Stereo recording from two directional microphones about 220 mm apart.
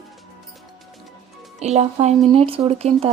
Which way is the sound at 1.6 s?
30° right (ahead or behind).